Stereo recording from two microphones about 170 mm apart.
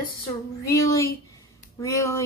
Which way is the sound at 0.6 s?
20° left (ahead or behind).